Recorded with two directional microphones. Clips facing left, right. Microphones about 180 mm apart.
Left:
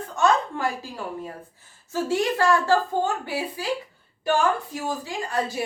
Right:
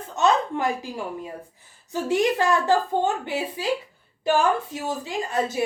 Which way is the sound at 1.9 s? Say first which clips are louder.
Right 2 dB; 20° right (ahead or behind).